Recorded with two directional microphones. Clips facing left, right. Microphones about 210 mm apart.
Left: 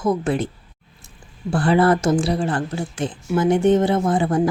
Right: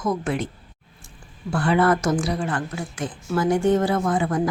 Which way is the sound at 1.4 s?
35° left (ahead or behind).